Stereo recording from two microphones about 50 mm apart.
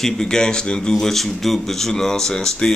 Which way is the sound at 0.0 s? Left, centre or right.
Centre.